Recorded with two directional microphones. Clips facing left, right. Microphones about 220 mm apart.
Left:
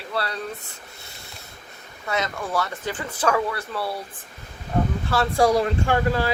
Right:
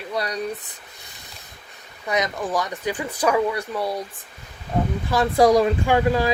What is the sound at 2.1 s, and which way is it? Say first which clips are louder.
Speech: right 3 dB; 15° right (ahead or behind).